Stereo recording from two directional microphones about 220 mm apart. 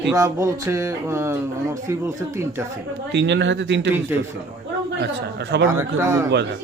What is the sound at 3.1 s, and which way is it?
Speech, 50° right (ahead or behind).